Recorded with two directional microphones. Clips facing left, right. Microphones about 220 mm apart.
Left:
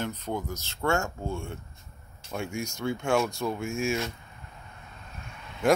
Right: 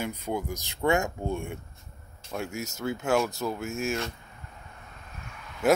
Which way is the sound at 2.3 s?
Centre (ahead or behind).